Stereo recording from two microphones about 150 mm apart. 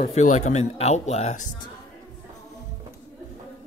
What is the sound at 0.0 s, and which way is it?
Speech, 55° left (ahead or behind).